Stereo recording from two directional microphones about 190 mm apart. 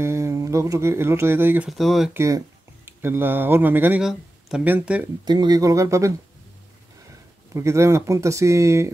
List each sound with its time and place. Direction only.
0.0 s speech: 15° right (ahead or behind)
2.1 s speech: 15° right (ahead or behind)
5.2 s speech: 20° right (ahead or behind)
7.5 s speech: 15° right (ahead or behind)